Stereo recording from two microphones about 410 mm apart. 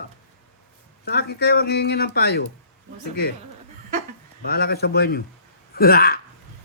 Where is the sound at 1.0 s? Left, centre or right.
Left.